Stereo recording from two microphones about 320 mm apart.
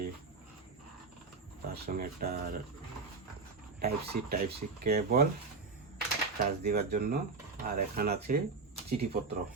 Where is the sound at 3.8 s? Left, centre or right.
Right.